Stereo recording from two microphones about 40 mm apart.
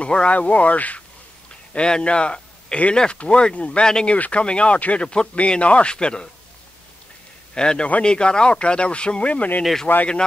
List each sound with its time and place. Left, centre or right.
0.0 s speech: left
1.7 s speech: left
5.0 s speech: left
7.5 s speech: left
9.3 s speech: left